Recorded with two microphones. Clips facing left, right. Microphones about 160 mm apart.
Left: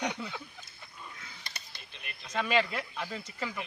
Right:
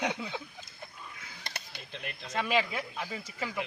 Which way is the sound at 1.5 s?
75° right (ahead or behind).